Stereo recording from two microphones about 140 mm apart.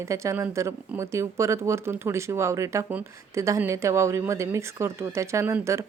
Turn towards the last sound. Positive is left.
turn(degrees=-20)  # may be behind; listen again after turning